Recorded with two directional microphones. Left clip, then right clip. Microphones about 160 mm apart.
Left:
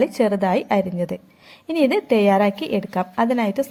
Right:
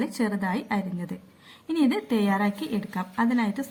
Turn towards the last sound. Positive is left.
turn(degrees=30)  # may be behind; listen again after turning